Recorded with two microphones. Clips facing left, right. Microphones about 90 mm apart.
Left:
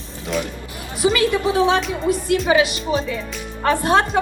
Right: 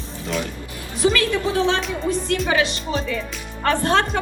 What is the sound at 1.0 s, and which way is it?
Speech, 15° left (ahead or behind).